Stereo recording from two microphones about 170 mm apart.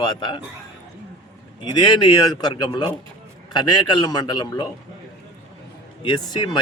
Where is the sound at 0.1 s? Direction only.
25° left (ahead or behind).